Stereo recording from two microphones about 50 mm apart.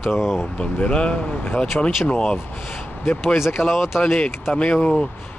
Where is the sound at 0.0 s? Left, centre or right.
Centre.